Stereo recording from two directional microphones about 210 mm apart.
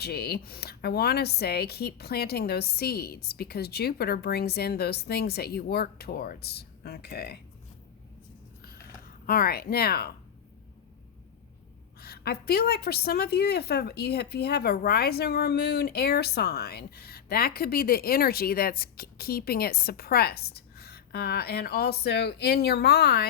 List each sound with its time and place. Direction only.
0.0 s a woman's voice: 50° left (ahead or behind)
8.6 s a sound: 45° left (ahead or behind)
11.9 s a woman's voice: 45° left (ahead or behind)